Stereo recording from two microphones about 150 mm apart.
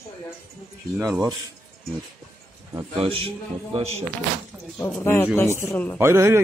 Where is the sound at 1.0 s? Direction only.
25° right (ahead or behind).